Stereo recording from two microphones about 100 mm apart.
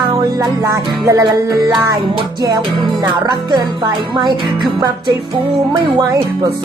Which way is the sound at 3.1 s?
45° right (ahead or behind).